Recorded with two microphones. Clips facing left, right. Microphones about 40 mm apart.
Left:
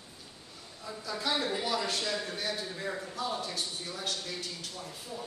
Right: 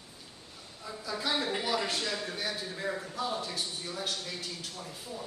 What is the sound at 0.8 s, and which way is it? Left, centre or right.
A man's voice, centre.